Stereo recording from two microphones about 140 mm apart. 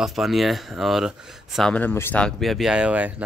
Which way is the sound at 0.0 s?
Centre (ahead or behind).